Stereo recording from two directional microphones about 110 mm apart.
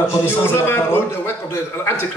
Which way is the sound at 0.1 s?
20° left (ahead or behind).